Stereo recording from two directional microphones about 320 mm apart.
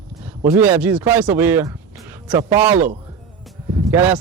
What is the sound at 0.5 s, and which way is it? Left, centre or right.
A man's voice, centre.